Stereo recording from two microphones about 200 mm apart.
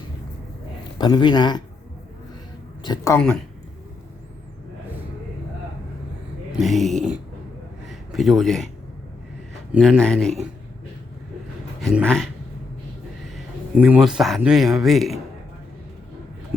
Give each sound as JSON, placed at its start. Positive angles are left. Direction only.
{"t": 0.9, "sound": "a man's voice", "side_deg": 20}
{"t": 2.8, "sound": "speech", "side_deg": 20}
{"t": 3.2, "sound": "speech", "side_deg": 5}
{"t": 6.5, "sound": "speech", "side_deg": 0}
{"t": 7.9, "sound": "a sound", "side_deg": 0}
{"t": 9.7, "sound": "speech", "side_deg": 0}
{"t": 11.8, "sound": "speech", "side_deg": 0}
{"t": 13.3, "sound": "speech", "side_deg": -5}